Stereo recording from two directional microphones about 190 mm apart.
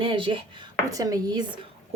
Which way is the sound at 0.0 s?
25° right (ahead or behind).